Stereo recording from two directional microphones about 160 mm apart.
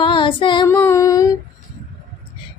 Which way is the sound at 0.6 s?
15° left (ahead or behind).